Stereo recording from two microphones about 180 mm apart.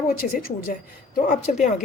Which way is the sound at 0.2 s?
45° left (ahead or behind).